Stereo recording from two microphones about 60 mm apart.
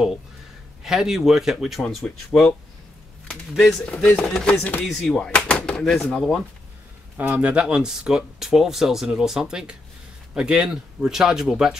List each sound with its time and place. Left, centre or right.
0.8 s speech: centre
4.2 s speech: centre
4.8 s speech: centre
5.3 s speech: centre
6.1 s speech: centre
7.2 s speech: right; by 11.7 s centre